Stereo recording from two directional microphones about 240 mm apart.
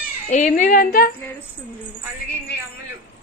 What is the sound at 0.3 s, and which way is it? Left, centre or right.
Speech, left.